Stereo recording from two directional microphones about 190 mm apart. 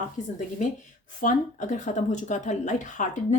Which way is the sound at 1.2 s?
40° left (ahead or behind).